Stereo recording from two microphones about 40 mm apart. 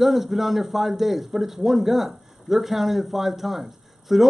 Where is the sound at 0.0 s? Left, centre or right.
Centre.